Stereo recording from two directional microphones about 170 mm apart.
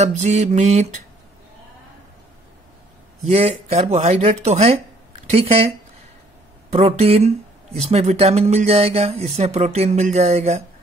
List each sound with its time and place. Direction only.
0.0 s speech: 40° right (ahead or behind)
3.3 s speech: 35° right (ahead or behind)
6.7 s speech: 35° right (ahead or behind)